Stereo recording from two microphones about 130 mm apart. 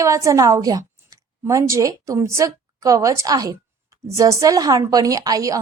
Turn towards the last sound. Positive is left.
turn(degrees=-25)  # may be behind; listen again after turning